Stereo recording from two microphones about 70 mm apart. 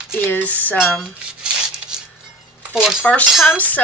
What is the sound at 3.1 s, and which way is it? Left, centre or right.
Speech, centre.